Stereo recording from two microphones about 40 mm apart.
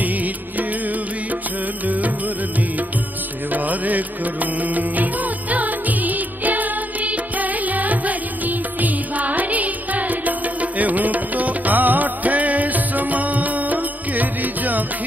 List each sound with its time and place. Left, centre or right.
3.5 s music: right
5.5 s music: right